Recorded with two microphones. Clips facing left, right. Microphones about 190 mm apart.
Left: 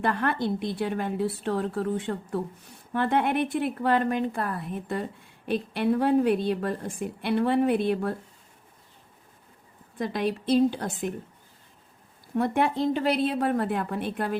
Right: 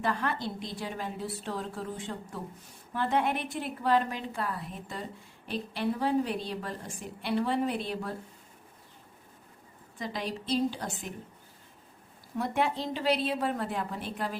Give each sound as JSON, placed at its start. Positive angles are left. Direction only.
{"t": 0.0, "sound": "a woman's voice", "side_deg": 60}
{"t": 10.0, "sound": "a woman's voice", "side_deg": 55}
{"t": 12.4, "sound": "a woman's voice", "side_deg": 55}